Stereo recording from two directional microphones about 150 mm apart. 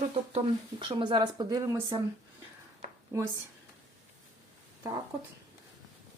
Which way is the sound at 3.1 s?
20° right (ahead or behind).